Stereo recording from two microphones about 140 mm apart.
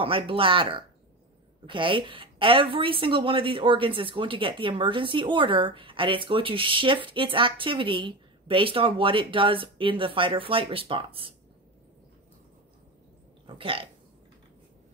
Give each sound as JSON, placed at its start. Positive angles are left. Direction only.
{"t": 0.0, "sound": "a woman's voice", "side_deg": -40}
{"t": 13.5, "sound": "speech", "side_deg": -40}